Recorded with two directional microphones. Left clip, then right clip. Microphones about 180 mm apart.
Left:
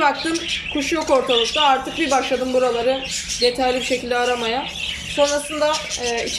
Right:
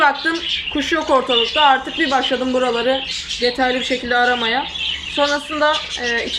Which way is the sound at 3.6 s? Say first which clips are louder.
Right 1 dB; 10° left (ahead or behind).